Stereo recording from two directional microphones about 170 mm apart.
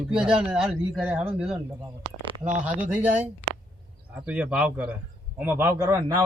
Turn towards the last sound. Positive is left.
turn(degrees=-10)  # may be behind; listen again after turning